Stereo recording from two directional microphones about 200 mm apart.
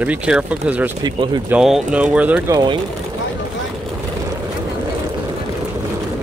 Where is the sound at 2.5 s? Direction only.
20° right (ahead or behind).